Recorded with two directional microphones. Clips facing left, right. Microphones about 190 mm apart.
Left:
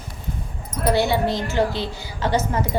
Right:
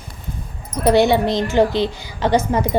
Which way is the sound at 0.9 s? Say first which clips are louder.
Right 5 dB; 20° right (ahead or behind).